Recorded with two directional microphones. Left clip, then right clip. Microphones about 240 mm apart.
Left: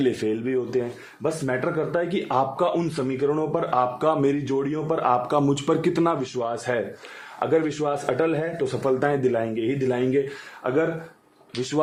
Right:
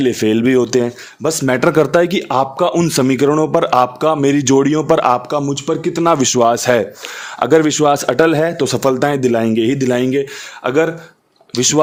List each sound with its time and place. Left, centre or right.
0.0 s speech: right
0.3 s a man's voice: right
2.9 s a man's voice: right
4.4 s a man's voice: right
5.5 s speech: centre
6.1 s a man's voice: right